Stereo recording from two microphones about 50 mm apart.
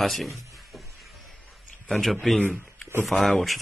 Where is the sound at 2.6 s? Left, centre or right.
Right.